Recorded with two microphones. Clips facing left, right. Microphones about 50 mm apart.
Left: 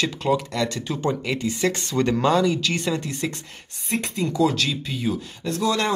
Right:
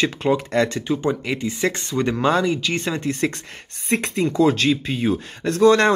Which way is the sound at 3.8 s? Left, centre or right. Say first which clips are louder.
Right 4 dB; right.